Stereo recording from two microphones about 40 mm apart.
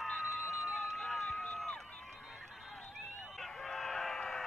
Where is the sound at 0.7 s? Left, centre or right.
Centre.